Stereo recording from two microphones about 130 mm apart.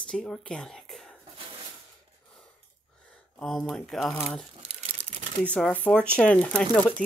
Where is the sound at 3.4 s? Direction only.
Centre (ahead or behind).